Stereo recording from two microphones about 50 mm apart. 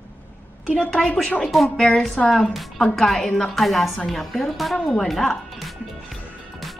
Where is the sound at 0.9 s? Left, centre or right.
Left.